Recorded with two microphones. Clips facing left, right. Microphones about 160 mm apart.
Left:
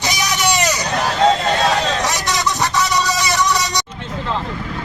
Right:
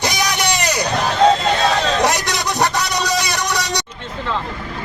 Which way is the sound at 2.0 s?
55° right (ahead or behind).